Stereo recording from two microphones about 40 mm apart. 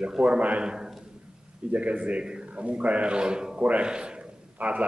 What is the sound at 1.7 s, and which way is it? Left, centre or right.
A man's voice, right.